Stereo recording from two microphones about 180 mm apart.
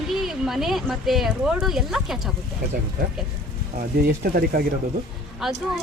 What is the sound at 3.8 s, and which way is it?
Speech, 55° right (ahead or behind).